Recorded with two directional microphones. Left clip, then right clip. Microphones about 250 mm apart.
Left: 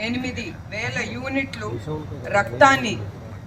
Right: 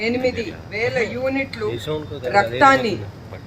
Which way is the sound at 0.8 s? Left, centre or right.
Centre.